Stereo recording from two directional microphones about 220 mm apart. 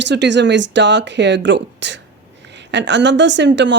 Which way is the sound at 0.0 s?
55° right (ahead or behind).